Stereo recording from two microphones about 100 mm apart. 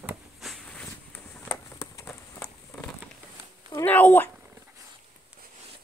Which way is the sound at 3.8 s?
15° left (ahead or behind).